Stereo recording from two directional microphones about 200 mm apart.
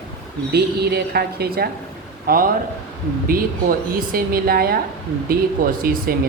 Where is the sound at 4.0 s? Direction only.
45° right (ahead or behind).